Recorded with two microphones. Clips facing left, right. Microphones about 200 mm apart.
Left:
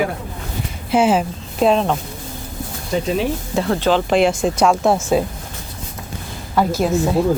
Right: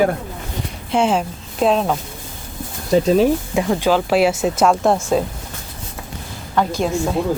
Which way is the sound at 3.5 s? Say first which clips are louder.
Left 4 dB; 10° right (ahead or behind).